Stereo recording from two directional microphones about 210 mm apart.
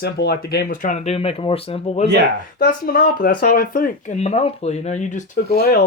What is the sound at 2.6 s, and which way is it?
Speech, 45° left (ahead or behind).